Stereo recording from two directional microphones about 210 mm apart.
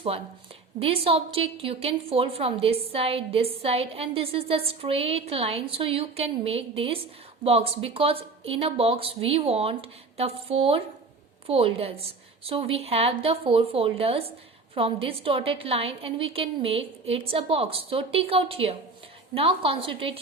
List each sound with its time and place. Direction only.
0.8 s a woman's voice: 25° right (ahead or behind)